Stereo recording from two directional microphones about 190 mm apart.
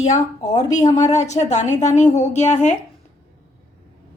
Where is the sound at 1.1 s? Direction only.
35° left (ahead or behind).